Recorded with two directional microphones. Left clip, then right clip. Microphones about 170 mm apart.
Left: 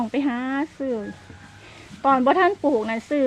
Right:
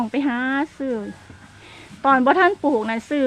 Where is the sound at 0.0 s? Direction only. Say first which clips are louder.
Right 2 dB; 15° right (ahead or behind).